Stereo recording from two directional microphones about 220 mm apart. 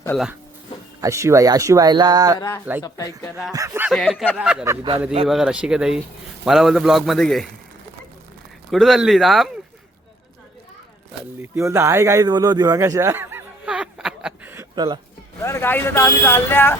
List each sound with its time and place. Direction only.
1.0 s speech: 15° right (ahead or behind)
2.8 s speech: 15° left (ahead or behind)
3.5 s a man's voice: 10° right (ahead or behind)
5.3 s a man's voice: 5° right (ahead or behind)
8.7 s a man's voice: centre (ahead or behind)
11.5 s a sound: 10° right (ahead or behind)
15.4 s speech: 10° left (ahead or behind)